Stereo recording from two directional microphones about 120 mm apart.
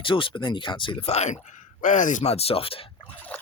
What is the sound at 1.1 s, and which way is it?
Speech, 70° left (ahead or behind).